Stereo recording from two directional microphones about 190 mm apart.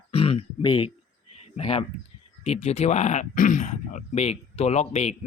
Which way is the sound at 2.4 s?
35° left (ahead or behind).